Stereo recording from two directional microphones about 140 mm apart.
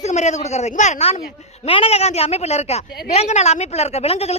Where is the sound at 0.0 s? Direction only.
55° left (ahead or behind).